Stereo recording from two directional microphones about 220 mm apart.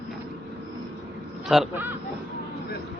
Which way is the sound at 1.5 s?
5° right (ahead or behind).